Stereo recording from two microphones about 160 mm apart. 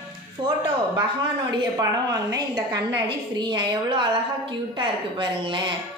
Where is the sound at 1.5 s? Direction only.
25° right (ahead or behind).